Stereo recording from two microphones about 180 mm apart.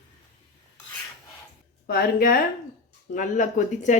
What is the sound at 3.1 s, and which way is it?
Speech, 45° left (ahead or behind).